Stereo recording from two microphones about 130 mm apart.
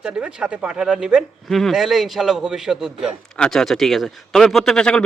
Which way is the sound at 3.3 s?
5° left (ahead or behind).